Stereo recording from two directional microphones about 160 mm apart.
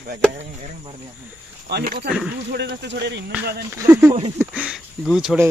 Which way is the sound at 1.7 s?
90° right.